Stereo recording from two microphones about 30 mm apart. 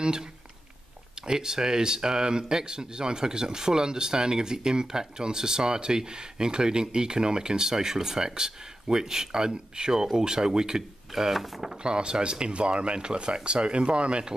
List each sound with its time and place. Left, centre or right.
1.2 s speech: right
11.1 s speech: centre
11.8 s speech: right